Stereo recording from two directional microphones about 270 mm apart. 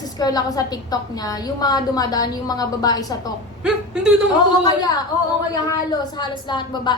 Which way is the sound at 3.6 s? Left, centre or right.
Centre.